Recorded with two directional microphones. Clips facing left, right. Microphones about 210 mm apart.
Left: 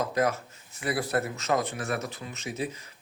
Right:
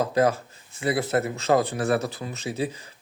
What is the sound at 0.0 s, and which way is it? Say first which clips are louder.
Speech: right 5 dB; 30° right (ahead or behind).